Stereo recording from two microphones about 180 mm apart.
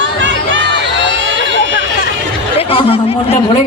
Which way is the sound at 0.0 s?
90° right.